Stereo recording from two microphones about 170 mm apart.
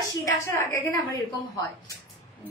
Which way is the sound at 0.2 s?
20° left (ahead or behind).